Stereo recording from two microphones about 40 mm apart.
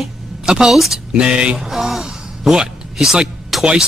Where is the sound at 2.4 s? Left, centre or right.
Centre.